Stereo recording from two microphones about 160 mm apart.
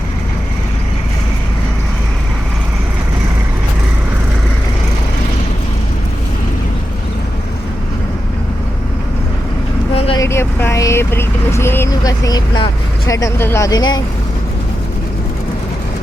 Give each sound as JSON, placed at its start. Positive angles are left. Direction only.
{"t": 9.9, "sound": "vehicle", "side_deg": 35}
{"t": 10.2, "sound": "vehicle", "side_deg": 15}